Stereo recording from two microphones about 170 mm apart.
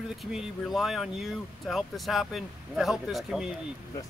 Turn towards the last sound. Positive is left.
turn(degrees=0)  # may be behind; listen again after turning